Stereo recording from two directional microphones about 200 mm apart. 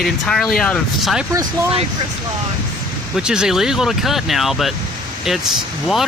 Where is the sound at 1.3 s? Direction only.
15° right (ahead or behind).